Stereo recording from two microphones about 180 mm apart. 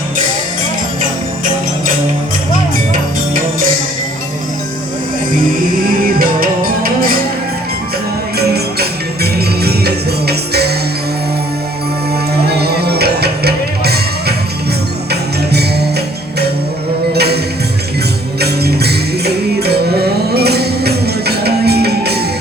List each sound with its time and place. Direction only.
6.0 s music: 55° right (ahead or behind)
8.4 s music: 60° right (ahead or behind)
12.5 s music: 60° right (ahead or behind)
17.2 s music: 65° right (ahead or behind)